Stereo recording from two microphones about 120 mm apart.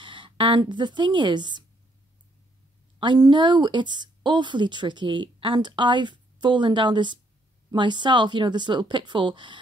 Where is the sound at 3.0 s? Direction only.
40° right (ahead or behind).